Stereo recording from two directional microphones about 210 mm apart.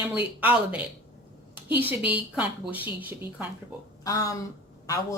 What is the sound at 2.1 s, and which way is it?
A woman's voice, 5° right (ahead or behind).